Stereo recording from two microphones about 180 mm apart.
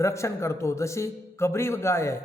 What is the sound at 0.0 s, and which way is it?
A man's voice, 15° left (ahead or behind).